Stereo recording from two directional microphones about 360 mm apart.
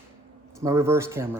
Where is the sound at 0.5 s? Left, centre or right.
Centre.